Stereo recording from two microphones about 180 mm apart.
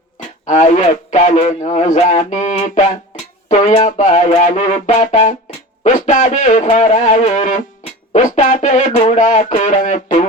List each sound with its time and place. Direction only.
0.4 s a man's voice: 40° left (ahead or behind)